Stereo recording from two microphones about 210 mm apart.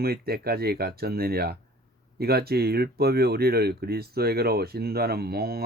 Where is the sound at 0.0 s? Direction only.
45° right (ahead or behind).